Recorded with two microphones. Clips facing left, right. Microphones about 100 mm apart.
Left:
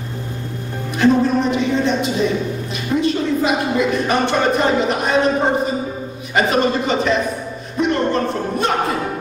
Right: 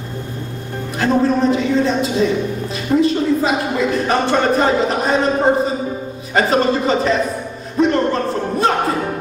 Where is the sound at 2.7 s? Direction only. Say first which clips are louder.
Right 4 dB; 35° right (ahead or behind).